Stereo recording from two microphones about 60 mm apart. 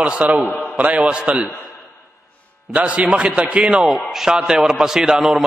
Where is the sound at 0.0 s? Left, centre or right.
Right.